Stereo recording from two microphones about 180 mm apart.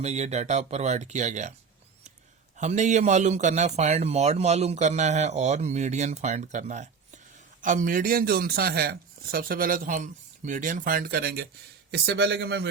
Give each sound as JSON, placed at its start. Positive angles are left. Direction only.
{"t": 0.0, "sound": "a man's voice", "side_deg": -40}
{"t": 2.6, "sound": "a man's voice", "side_deg": -40}